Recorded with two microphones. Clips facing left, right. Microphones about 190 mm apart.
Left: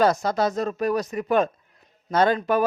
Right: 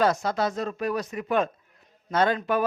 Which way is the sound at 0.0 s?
40° left (ahead or behind).